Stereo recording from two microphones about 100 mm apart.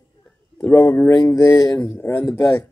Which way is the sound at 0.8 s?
20° left (ahead or behind).